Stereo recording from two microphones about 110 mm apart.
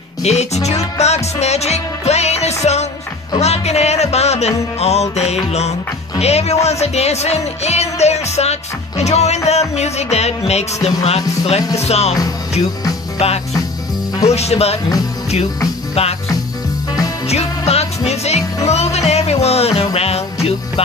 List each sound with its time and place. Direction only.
0.2 s music: 85° left
13.2 s music: 75° left (ahead or behind)
15.9 s music: 65° left (ahead or behind)
17.3 s music: 75° left (ahead or behind)